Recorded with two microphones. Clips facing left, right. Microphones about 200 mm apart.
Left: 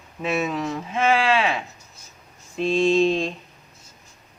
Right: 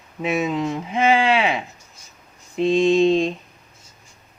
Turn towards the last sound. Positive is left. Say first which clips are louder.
# right 3 dB
turn(degrees=-20)  # may be behind; listen again after turning